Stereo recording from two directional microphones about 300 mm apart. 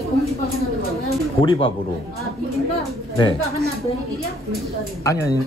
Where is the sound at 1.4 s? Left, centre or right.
Centre.